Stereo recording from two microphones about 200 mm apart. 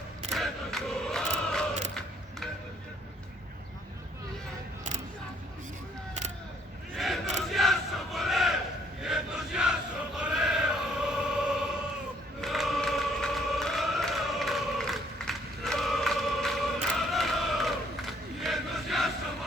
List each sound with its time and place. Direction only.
0.3 s crowd: centre (ahead or behind)
6.9 s battle cry: centre (ahead or behind)
9.0 s crowd: 5° right (ahead or behind)
10.2 s choir: 5° right (ahead or behind)
12.4 s chant: centre (ahead or behind)